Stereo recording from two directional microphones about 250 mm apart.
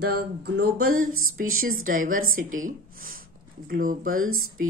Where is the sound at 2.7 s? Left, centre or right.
Right.